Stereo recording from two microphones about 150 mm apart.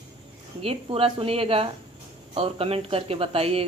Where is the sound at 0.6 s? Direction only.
40° right (ahead or behind).